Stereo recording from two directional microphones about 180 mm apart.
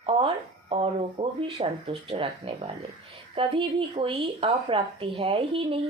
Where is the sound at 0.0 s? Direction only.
30° right (ahead or behind).